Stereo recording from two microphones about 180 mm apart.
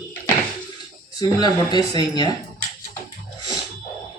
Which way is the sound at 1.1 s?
20° left (ahead or behind).